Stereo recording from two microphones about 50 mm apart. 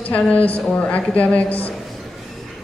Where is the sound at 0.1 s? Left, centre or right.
Left.